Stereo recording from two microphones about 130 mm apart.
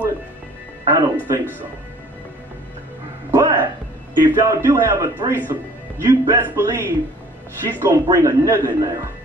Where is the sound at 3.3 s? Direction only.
25° right (ahead or behind).